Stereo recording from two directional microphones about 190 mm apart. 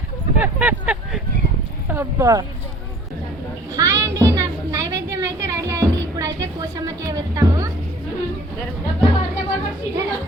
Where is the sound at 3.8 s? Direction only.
15° right (ahead or behind).